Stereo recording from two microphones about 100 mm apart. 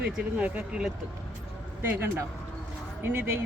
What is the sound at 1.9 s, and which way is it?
Speech, 25° right (ahead or behind).